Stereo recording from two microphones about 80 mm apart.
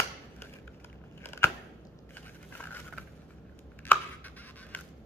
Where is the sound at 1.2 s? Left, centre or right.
Left.